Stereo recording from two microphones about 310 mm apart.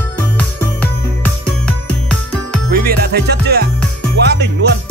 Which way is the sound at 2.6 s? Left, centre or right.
Right.